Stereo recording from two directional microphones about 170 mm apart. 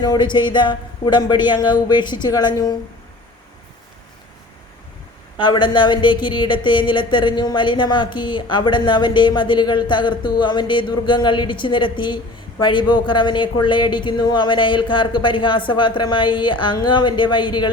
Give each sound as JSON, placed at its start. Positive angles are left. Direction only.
{"t": 0.0, "sound": "speech", "side_deg": 25}
{"t": 5.4, "sound": "speech", "side_deg": 30}